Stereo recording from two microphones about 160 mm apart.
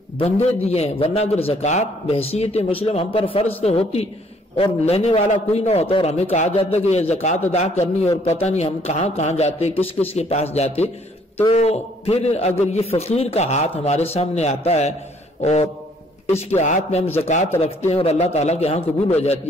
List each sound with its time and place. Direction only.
0.2 s a man's voice: 40° left (ahead or behind)